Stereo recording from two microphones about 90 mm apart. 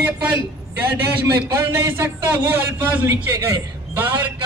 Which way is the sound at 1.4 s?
30° right (ahead or behind).